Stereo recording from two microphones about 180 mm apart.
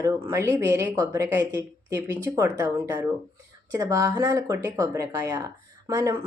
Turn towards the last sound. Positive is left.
turn(degrees=-15)  # may be behind; listen again after turning